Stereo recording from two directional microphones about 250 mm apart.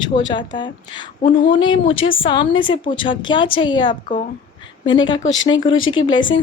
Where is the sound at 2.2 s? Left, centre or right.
Centre.